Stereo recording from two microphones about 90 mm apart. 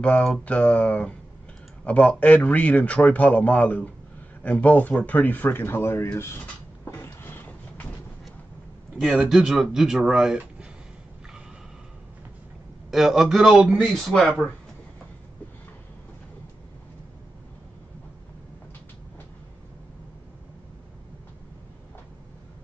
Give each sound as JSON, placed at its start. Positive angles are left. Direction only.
{"t": 0.0, "sound": "a man's voice", "side_deg": 10}
{"t": 6.9, "sound": "a sound", "side_deg": 25}
{"t": 9.0, "sound": "speech", "side_deg": -5}
{"t": 12.9, "sound": "speech", "side_deg": 0}